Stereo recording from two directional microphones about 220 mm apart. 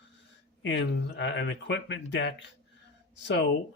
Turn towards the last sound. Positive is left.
turn(degrees=55)  # may be behind; listen again after turning